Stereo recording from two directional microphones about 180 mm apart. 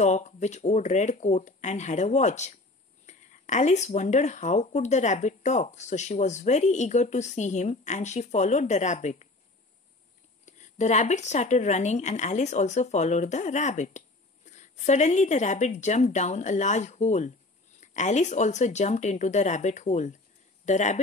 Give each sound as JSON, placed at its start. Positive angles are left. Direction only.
{"t": 0.0, "sound": "speech", "side_deg": 40}
{"t": 10.4, "sound": "speech", "side_deg": 40}